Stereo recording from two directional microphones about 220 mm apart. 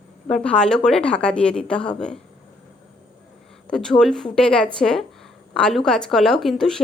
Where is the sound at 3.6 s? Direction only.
5° left (ahead or behind).